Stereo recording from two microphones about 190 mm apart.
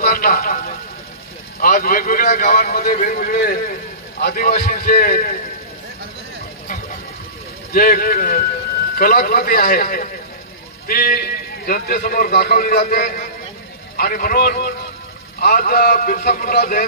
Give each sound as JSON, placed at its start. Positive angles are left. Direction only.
{"t": 0.0, "sound": "a sound", "side_deg": 50}
{"t": 1.6, "sound": "a man's voice", "side_deg": 50}
{"t": 7.7, "sound": "a man's voice", "side_deg": 50}